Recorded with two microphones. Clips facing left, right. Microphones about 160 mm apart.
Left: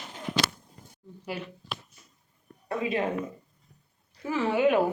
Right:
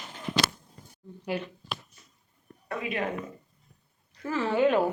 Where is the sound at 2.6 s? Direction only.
25° left (ahead or behind).